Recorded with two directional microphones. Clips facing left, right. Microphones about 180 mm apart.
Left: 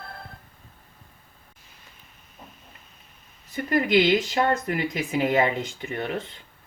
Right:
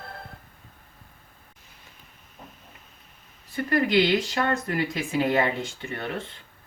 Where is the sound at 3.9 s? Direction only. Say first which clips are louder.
Left 2 dB; 20° left (ahead or behind).